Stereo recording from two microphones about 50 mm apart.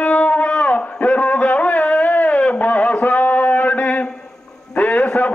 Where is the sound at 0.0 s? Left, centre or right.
Left.